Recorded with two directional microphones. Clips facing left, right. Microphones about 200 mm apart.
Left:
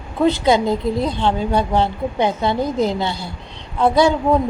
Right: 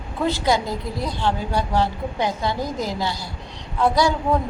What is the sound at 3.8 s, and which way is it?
Speech, 25° left (ahead or behind).